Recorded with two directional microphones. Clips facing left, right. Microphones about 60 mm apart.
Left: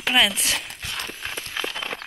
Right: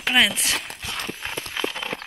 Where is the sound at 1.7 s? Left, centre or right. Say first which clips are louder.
Right 1 dB; centre.